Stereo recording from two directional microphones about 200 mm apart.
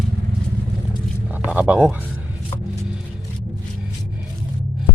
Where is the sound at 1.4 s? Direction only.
5° right (ahead or behind).